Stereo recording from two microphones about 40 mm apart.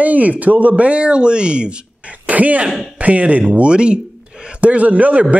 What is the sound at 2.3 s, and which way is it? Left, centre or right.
Speech, right.